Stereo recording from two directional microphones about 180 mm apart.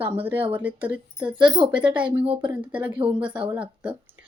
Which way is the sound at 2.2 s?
30° right (ahead or behind).